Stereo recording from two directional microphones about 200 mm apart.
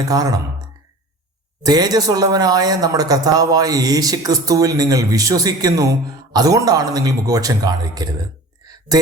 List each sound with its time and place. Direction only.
0.1 s speech: 20° right (ahead or behind)
1.6 s speech: 20° right (ahead or behind)
8.6 s a sound: 20° right (ahead or behind)